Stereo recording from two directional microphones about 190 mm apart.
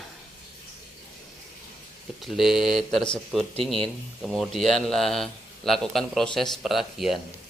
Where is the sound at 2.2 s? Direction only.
Centre (ahead or behind).